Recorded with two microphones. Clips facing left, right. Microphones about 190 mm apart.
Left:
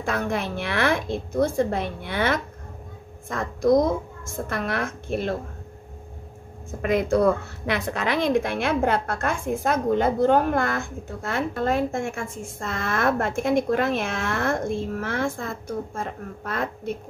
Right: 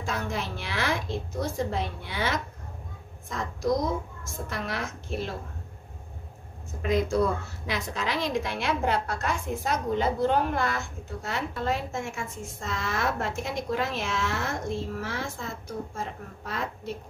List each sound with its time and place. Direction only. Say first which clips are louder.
0.0 s a woman's voice: left 6 dB; 55° left (ahead or behind)
6.8 s a woman's voice: left 4 dB; 60° left (ahead or behind)